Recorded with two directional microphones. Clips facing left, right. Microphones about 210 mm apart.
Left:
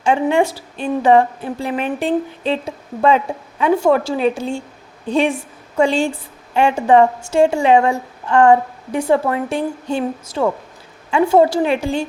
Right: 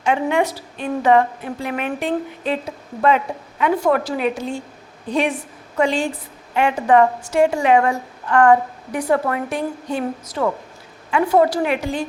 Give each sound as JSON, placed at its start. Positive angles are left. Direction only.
{"t": 0.0, "sound": "a woman's voice", "side_deg": 30}